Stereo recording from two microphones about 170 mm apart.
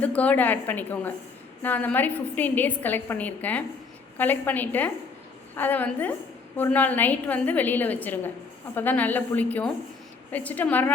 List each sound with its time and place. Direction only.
0.0 s a woman's voice: 10° left (ahead or behind)